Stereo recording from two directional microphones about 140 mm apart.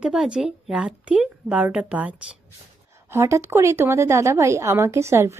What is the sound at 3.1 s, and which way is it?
Speech, 20° right (ahead or behind).